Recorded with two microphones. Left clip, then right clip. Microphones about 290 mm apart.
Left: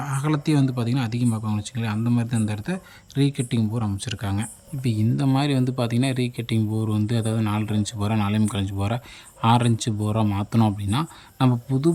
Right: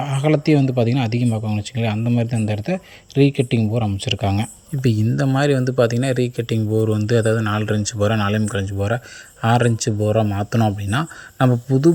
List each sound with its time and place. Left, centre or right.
0.0 s speech: centre